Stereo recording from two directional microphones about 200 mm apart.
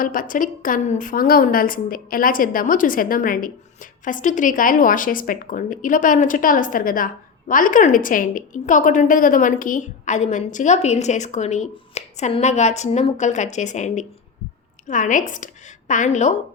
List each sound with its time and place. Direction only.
0.0 s a woman's voice: 45° left (ahead or behind)